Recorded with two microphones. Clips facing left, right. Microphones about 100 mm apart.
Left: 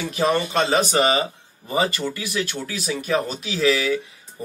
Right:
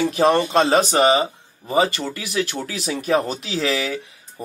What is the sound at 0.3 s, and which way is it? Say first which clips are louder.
Speech: right 2 dB; 30° right (ahead or behind).